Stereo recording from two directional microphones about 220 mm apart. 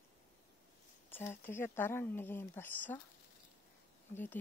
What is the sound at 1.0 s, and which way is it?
Speech, 10° left (ahead or behind).